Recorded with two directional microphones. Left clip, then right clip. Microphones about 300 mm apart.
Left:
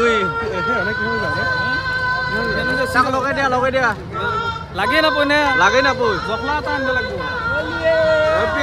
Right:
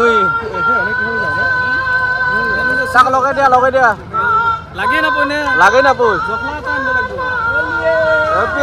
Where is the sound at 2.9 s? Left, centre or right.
Centre.